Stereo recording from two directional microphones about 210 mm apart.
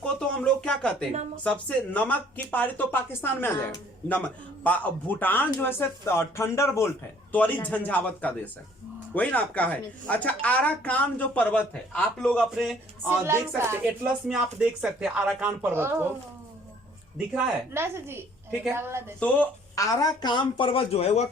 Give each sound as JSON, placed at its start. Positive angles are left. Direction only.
{"t": 0.0, "sound": "speech", "side_deg": 5}
{"t": 13.1, "sound": "speech", "side_deg": -10}
{"t": 17.3, "sound": "speech", "side_deg": -10}
{"t": 19.2, "sound": "speech", "side_deg": 10}